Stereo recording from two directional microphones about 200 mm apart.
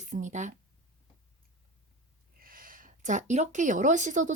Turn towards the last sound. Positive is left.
turn(degrees=-40)  # may be behind; listen again after turning